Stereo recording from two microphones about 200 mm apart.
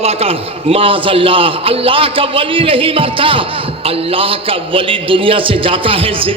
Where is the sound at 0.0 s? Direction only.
30° right (ahead or behind).